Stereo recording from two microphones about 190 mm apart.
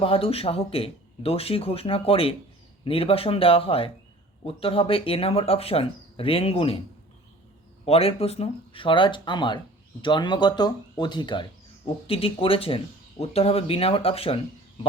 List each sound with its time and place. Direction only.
0.0 s speech: 30° left (ahead or behind)
7.9 s speech: 30° left (ahead or behind)